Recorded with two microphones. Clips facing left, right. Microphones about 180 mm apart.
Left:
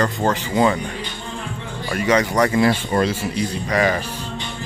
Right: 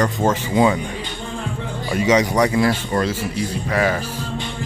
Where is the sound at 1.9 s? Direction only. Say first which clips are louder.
Right 1 dB; 10° right (ahead or behind).